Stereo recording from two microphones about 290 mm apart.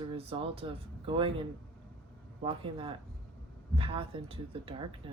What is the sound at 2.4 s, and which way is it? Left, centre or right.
Speech, centre.